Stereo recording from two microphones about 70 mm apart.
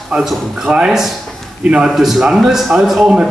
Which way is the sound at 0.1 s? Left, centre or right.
Centre.